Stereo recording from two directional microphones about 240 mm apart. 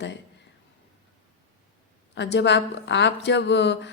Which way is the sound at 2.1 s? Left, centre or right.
Left.